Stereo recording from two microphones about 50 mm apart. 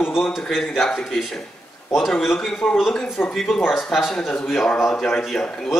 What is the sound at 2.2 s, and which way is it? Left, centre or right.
Speech, centre.